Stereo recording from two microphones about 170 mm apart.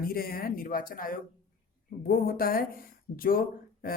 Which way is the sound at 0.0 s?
60° left (ahead or behind).